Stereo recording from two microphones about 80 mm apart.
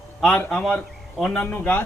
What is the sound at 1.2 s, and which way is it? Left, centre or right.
Speech, centre.